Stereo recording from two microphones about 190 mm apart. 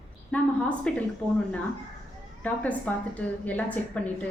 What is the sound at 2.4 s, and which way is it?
A woman's voice, 10° left (ahead or behind).